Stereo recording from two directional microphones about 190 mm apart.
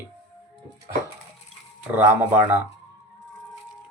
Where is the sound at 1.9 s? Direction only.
10° right (ahead or behind).